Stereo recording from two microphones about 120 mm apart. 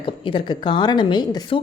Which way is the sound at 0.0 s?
45° left (ahead or behind).